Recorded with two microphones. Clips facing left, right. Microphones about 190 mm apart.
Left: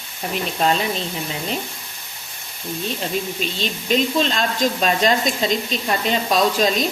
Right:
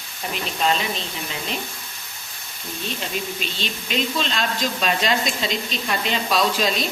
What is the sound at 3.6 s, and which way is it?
Speech, 40° left (ahead or behind).